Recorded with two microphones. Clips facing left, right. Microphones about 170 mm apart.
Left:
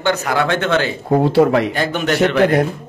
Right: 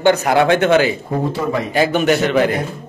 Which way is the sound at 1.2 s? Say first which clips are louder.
Left 8 dB; 70° left (ahead or behind).